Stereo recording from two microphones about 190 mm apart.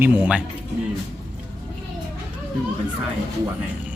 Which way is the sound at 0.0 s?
10° right (ahead or behind).